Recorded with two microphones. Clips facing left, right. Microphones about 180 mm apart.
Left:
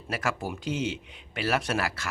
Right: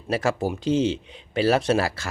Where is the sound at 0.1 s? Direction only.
30° right (ahead or behind).